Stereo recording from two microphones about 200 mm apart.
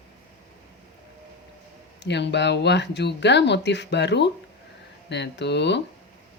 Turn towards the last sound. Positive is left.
turn(degrees=60)  # may be behind; listen again after turning